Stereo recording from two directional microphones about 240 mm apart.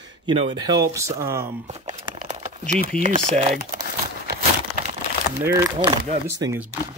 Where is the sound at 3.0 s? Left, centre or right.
Right.